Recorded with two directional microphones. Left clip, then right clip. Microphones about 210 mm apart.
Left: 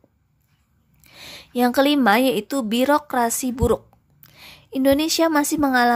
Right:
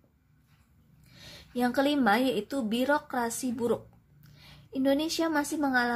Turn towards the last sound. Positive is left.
turn(degrees=35)  # may be behind; listen again after turning